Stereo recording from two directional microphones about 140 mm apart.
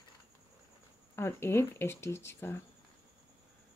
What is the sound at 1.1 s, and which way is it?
Speech, 15° left (ahead or behind).